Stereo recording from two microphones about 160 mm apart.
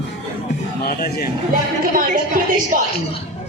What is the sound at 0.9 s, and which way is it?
Speech, 75° left (ahead or behind).